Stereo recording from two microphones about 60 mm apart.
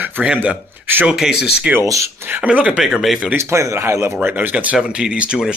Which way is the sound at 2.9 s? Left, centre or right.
Centre.